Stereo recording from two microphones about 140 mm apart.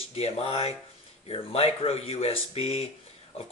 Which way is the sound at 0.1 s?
45° left (ahead or behind).